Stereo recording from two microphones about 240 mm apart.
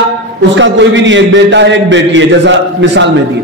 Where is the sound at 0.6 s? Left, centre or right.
Right.